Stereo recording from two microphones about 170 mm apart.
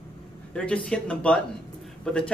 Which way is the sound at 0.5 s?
5° left (ahead or behind).